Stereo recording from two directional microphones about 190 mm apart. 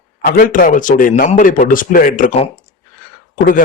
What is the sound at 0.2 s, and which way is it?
Speech, 45° left (ahead or behind).